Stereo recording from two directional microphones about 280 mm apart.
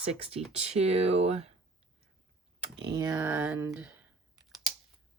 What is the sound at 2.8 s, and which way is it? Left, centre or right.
Speech, centre.